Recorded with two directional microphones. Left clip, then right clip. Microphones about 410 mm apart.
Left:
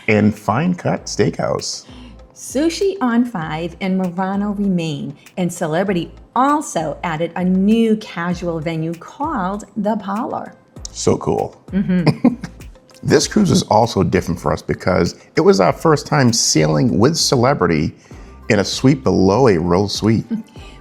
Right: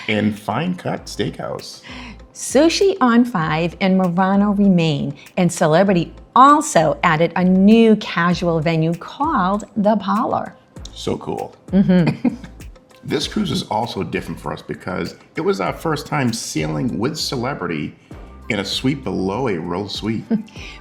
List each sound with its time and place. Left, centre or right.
0.0 s speech: left
2.5 s a woman's voice: right
10.9 s speech: left
11.7 s a woman's voice: centre
13.1 s speech: left